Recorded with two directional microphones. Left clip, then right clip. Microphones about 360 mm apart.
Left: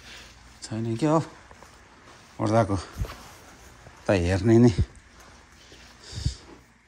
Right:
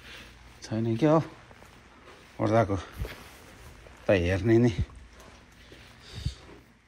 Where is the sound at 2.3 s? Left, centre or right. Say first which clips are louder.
Left 1 dB; centre.